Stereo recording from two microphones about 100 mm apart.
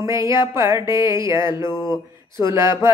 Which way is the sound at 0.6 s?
25° right (ahead or behind).